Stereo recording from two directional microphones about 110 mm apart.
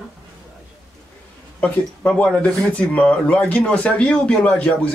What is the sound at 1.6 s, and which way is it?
Speech, 10° left (ahead or behind).